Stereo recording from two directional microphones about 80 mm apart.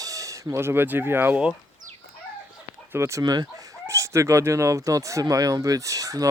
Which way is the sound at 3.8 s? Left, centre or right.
Right.